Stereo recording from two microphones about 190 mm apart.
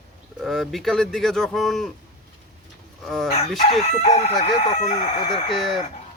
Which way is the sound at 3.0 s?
Centre (ahead or behind).